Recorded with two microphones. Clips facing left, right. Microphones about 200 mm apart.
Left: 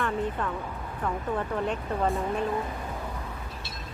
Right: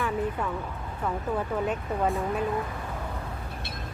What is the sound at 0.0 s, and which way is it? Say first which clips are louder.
Music: even; 10° right (ahead or behind).